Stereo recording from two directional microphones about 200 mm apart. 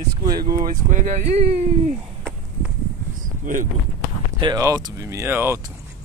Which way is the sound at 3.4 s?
40° right (ahead or behind).